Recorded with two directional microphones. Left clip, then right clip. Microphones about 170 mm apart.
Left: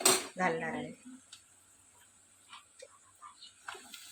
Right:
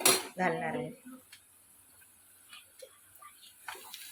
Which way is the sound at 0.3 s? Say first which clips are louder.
Right 1 dB; 10° right (ahead or behind).